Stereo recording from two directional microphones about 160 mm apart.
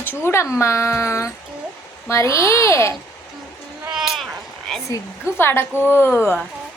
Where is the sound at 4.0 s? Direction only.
Centre (ahead or behind).